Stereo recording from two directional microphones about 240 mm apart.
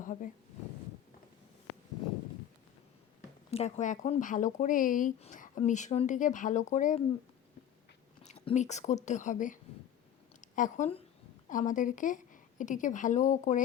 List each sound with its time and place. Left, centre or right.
0.0 s a sound: left
3.5 s speech: left
8.2 s a woman's voice: left